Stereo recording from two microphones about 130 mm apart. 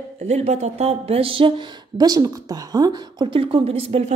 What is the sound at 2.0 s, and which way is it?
A woman's voice, 30° right (ahead or behind).